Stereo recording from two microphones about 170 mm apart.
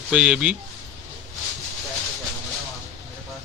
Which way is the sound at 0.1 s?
5° right (ahead or behind).